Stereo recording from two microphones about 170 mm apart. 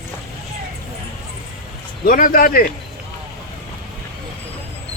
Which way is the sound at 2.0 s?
55° left (ahead or behind).